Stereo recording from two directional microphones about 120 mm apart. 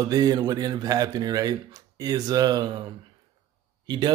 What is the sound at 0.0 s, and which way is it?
Speech, 30° right (ahead or behind).